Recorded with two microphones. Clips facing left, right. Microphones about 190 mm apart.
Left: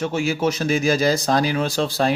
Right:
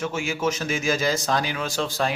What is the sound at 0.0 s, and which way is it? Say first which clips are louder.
Speech: left 4 dB; 35° left (ahead or behind).